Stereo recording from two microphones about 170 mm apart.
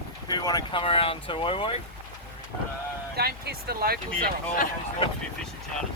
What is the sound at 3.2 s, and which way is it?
Speech, 65° right (ahead or behind).